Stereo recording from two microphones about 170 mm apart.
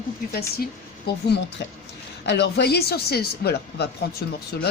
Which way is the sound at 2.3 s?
80° left.